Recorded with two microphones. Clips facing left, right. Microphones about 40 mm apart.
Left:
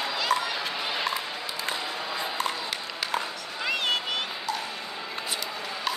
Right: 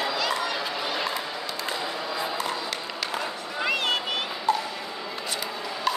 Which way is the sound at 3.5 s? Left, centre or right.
Centre.